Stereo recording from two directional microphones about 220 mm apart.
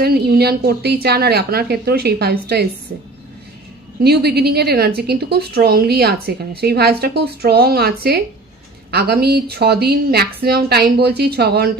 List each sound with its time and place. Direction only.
0.0 s a woman's voice: 45° right (ahead or behind)
4.0 s a woman's voice: 45° right (ahead or behind)